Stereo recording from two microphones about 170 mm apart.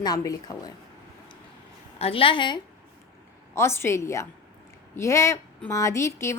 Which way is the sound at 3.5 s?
15° left (ahead or behind).